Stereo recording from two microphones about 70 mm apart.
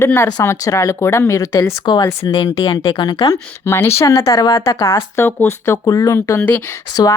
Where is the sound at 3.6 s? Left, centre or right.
Left.